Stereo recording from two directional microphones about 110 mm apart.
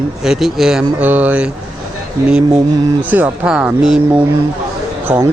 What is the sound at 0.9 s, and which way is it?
Speech, 15° right (ahead or behind).